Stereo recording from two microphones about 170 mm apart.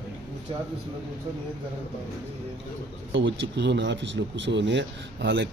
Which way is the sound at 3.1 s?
90° right.